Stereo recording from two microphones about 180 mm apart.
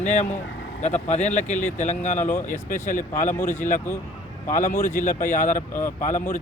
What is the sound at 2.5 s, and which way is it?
Speech, 45° left (ahead or behind).